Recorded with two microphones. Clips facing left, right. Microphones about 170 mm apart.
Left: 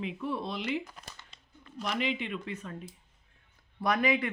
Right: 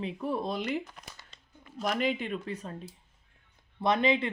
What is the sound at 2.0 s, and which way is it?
Speech, 45° right (ahead or behind).